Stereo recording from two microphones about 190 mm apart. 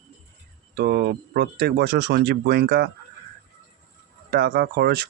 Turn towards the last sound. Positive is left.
turn(degrees=-55)  # may be behind; listen again after turning